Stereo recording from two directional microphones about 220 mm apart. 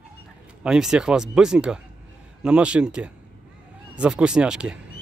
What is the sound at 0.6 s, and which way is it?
Speech, 5° right (ahead or behind).